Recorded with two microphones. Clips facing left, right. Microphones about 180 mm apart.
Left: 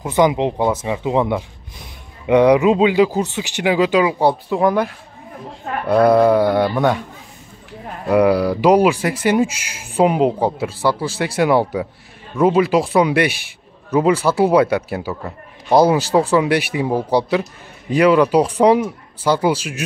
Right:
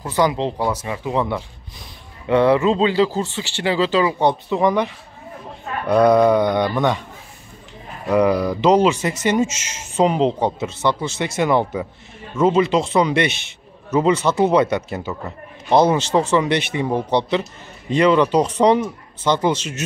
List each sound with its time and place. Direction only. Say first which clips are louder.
0.0 s speech: left 4 dB; 20° left (ahead or behind)
8.1 s speech: left 2 dB; 10° left (ahead or behind)